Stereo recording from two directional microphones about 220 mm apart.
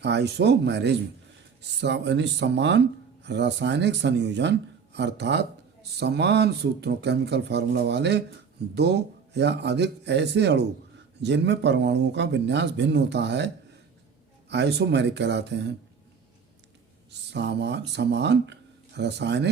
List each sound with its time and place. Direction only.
0.0 s speech: 50° right (ahead or behind)
14.5 s speech: 50° right (ahead or behind)
17.1 s speech: 50° right (ahead or behind)